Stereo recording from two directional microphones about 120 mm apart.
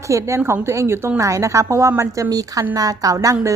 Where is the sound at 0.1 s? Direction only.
25° right (ahead or behind).